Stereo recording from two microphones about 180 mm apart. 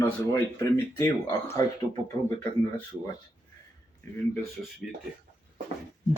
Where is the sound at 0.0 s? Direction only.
15° left (ahead or behind).